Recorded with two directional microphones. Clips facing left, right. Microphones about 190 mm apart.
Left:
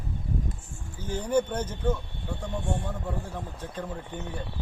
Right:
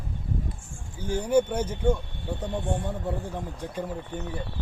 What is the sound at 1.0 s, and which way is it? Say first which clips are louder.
A man's voice: right 3 dB; 10° right (ahead or behind).